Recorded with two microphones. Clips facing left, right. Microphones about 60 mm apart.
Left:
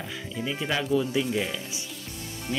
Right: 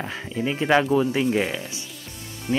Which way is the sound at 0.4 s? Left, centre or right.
Right.